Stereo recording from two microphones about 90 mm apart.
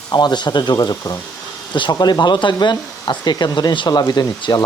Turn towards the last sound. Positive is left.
turn(degrees=50)  # may be behind; listen again after turning